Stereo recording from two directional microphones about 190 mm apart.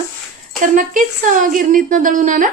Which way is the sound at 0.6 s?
45° right (ahead or behind).